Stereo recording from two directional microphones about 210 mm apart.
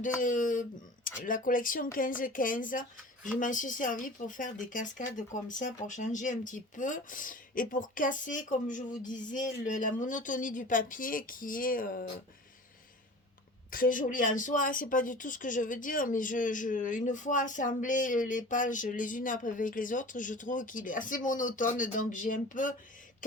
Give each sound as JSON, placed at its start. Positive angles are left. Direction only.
{"t": 0.2, "sound": "speech", "side_deg": 40}
{"t": 13.7, "sound": "speech", "side_deg": 40}